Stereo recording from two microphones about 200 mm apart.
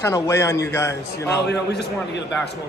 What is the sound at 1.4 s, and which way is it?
Speech, 55° left (ahead or behind).